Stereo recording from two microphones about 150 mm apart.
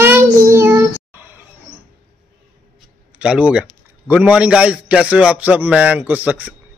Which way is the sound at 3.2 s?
5° right (ahead or behind).